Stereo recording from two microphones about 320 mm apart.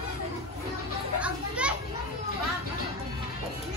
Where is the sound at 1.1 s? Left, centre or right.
Centre.